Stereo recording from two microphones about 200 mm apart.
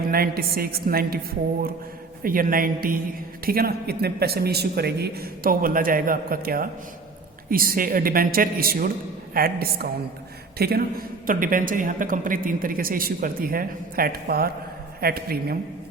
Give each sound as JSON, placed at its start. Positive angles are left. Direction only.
{"t": 0.0, "sound": "a man's voice", "side_deg": -50}
{"t": 2.2, "sound": "a man's voice", "side_deg": -45}